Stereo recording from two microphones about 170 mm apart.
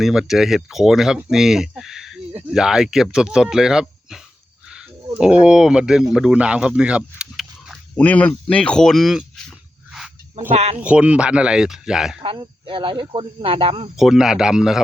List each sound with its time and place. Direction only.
0.0 s speech: 5° right (ahead or behind)
7.9 s a sound: 10° left (ahead or behind)
10.5 s speech: 40° right (ahead or behind)
10.8 s speech: 5° right (ahead or behind)
12.2 s speech: 30° right (ahead or behind)
13.9 s speech: centre (ahead or behind)